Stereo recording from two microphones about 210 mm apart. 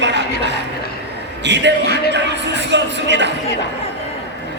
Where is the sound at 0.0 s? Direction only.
55° right (ahead or behind).